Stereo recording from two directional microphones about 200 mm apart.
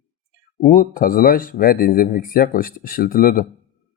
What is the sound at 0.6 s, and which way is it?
Speech, 40° left (ahead or behind).